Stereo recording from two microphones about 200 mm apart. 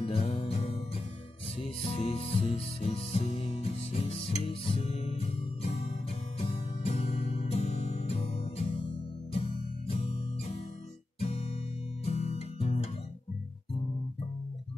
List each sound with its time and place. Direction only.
0.0 s music: 30° left (ahead or behind)
12.0 s music: 30° left (ahead or behind)